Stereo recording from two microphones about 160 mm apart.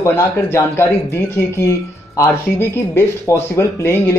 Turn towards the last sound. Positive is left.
turn(degrees=15)  # may be behind; listen again after turning